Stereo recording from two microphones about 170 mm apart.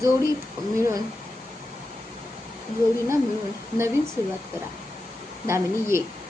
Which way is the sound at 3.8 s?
15° right (ahead or behind).